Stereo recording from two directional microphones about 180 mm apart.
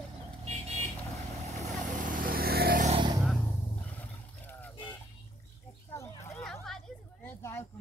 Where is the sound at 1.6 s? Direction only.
45° right (ahead or behind).